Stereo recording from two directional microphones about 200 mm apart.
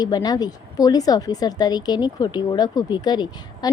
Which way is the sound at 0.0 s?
20° left (ahead or behind).